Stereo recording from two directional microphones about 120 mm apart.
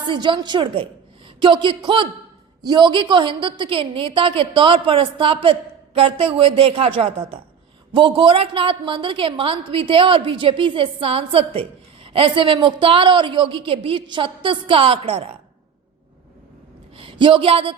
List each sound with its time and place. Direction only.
0.0 s a woman's voice: 40° right (ahead or behind)
17.0 s speech: 45° right (ahead or behind)